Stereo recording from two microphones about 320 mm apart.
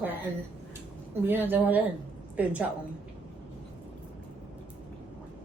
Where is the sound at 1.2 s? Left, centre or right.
Centre.